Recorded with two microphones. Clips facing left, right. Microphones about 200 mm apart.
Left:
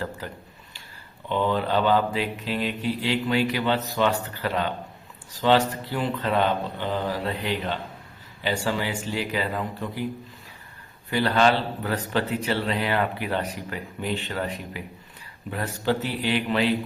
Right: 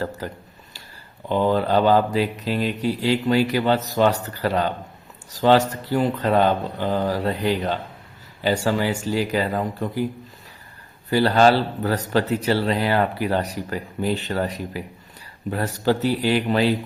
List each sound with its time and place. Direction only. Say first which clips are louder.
0.2 s a man's voice: right 5 dB; 40° right (ahead or behind)
11.1 s a man's voice: right 5 dB; 40° right (ahead or behind)